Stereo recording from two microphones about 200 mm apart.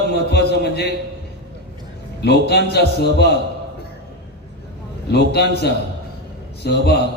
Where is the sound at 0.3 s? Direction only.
55° left (ahead or behind).